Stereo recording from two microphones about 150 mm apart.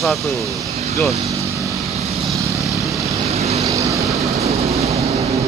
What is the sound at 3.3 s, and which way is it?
Vehicle, 45° right (ahead or behind).